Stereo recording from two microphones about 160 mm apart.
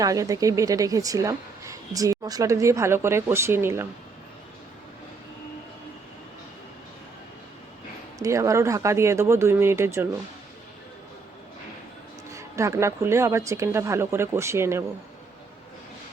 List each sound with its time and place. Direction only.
0.0 s a woman's voice: 20° right (ahead or behind)
8.2 s speech: 20° right (ahead or behind)
12.3 s speech: 20° right (ahead or behind)